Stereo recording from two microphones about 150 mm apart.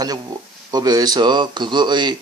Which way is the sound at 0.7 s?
25° right (ahead or behind).